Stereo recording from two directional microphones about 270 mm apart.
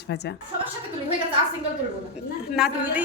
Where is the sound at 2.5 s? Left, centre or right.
Centre.